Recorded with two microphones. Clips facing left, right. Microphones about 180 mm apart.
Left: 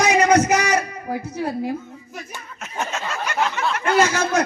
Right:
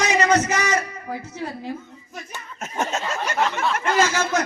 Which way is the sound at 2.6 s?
45° right (ahead or behind).